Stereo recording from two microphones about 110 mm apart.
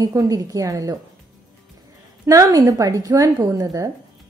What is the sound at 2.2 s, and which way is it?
A woman's voice, 30° right (ahead or behind).